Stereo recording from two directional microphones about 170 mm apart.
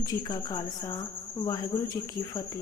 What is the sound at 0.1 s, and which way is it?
A woman's voice, 20° left (ahead or behind).